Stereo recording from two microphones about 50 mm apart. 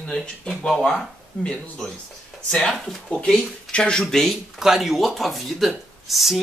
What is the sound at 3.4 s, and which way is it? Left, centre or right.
Speech, centre.